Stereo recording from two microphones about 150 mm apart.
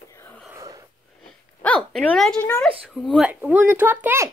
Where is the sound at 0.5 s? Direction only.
25° right (ahead or behind).